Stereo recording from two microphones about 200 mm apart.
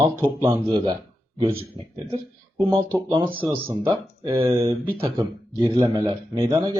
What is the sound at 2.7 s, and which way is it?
A man's voice, 10° right (ahead or behind).